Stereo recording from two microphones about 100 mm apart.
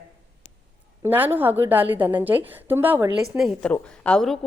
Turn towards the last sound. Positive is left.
turn(degrees=10)  # may be behind; listen again after turning